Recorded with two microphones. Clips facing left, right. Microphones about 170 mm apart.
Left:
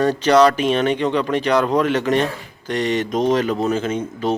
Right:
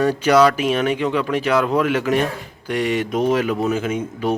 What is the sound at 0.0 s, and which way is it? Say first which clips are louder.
A man's voice: left 1 dB; 10° right (ahead or behind).